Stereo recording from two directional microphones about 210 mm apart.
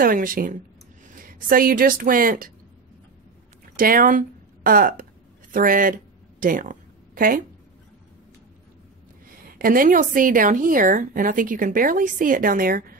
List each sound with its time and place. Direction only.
0.0 s a woman's voice: 40° right (ahead or behind)
3.7 s a woman's voice: 40° right (ahead or behind)
6.4 s a sound: 40° right (ahead or behind)
9.6 s a woman's voice: 40° right (ahead or behind)